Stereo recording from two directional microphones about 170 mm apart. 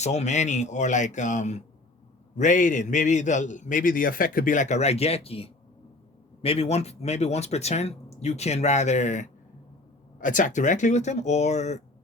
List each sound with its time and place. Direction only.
0.0 s a man's voice: 40° left (ahead or behind)